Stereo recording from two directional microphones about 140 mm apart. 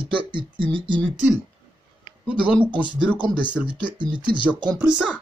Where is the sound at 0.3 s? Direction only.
35° right (ahead or behind).